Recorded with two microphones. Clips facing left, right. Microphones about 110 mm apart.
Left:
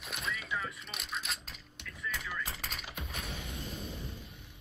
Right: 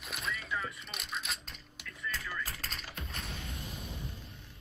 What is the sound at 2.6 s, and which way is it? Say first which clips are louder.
Music: left 1 dB; 10° left (ahead or behind).